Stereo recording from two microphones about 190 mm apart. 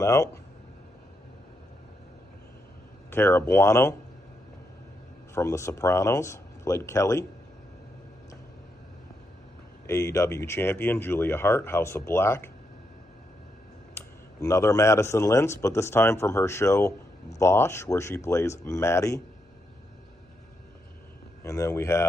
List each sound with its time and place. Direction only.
0.0 s speech: 15° left (ahead or behind)
3.1 s speech: 10° left (ahead or behind)
5.3 s speech: 15° left (ahead or behind)
9.8 s speech: 15° left (ahead or behind)
13.9 s speech: 15° left (ahead or behind)
21.4 s speech: 15° left (ahead or behind)